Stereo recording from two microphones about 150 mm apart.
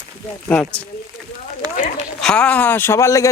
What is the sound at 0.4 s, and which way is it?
Speech, 10° left (ahead or behind).